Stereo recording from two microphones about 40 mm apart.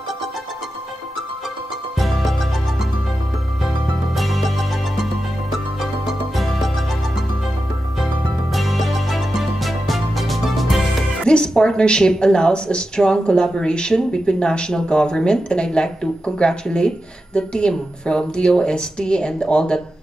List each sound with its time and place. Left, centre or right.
2.0 s music: centre
4.2 s music: centre
6.3 s music: centre
8.5 s music: centre
11.2 s a woman's voice: centre